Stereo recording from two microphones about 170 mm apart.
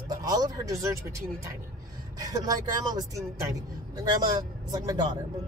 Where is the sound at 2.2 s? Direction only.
20° right (ahead or behind).